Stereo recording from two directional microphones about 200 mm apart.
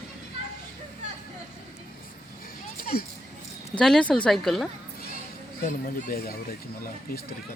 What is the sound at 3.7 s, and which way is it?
Speech, 5° left (ahead or behind).